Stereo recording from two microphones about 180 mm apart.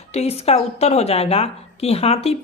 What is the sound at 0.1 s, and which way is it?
A woman's voice, 35° left (ahead or behind).